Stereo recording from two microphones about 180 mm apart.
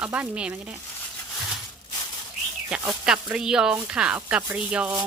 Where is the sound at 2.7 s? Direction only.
5° right (ahead or behind).